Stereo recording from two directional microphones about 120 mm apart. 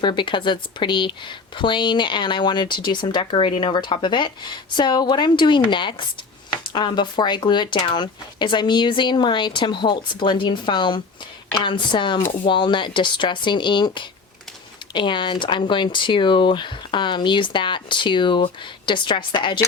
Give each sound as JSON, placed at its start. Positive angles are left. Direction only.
{"t": 0.0, "sound": "a woman's voice", "side_deg": 40}